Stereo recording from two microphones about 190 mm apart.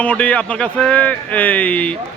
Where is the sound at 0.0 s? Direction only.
5° left (ahead or behind).